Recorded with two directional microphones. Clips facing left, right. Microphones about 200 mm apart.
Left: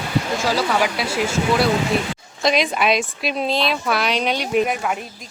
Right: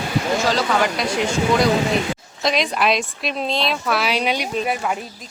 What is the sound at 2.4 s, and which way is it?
Speech, centre (ahead or behind).